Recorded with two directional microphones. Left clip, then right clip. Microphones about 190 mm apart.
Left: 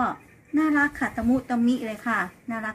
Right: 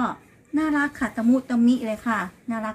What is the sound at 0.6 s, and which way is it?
Speech, 45° right (ahead or behind).